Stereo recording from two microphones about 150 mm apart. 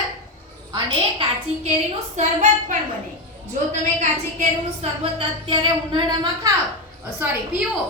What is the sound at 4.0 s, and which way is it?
A woman's voice, 50° right (ahead or behind).